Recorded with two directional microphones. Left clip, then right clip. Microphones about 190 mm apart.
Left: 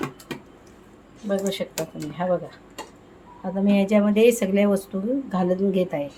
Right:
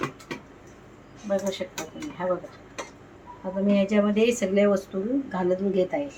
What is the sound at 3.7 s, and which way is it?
Speech, 50° left (ahead or behind).